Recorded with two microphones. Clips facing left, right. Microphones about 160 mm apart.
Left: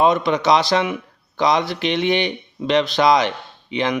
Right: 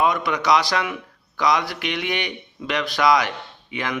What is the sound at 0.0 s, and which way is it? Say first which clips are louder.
A man's voice: left 5 dB; 25° left (ahead or behind).